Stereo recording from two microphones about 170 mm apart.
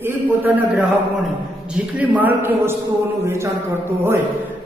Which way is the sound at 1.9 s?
10° right (ahead or behind).